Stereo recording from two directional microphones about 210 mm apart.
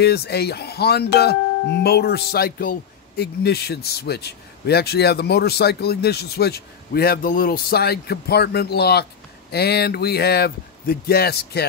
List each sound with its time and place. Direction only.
0.0 s speech: 50° left (ahead or behind)